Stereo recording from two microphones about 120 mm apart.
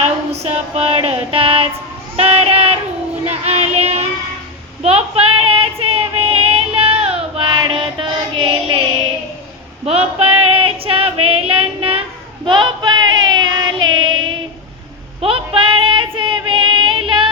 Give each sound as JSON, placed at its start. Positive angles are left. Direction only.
{"t": 0.3, "sound": "music", "side_deg": -60}
{"t": 3.2, "sound": "child singing", "side_deg": -65}
{"t": 4.8, "sound": "female singing", "side_deg": -55}
{"t": 9.8, "sound": "female singing", "side_deg": -60}
{"t": 12.5, "sound": "child singing", "side_deg": -40}
{"t": 15.2, "sound": "female singing", "side_deg": -45}